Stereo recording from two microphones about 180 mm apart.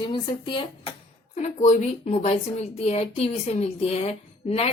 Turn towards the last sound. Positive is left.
turn(degrees=35)  # may be behind; listen again after turning